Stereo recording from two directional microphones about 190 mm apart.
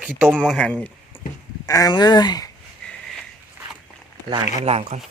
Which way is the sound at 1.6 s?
20° left (ahead or behind).